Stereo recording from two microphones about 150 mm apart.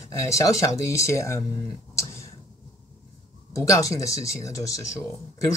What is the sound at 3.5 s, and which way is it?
Speech, 20° left (ahead or behind).